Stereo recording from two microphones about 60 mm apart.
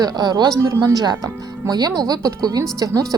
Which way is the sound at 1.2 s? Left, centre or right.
Right.